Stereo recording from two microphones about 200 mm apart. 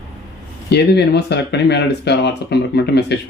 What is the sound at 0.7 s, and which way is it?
Speech, 55° left (ahead or behind).